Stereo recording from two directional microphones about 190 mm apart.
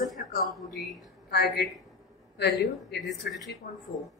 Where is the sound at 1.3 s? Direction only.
55° left (ahead or behind).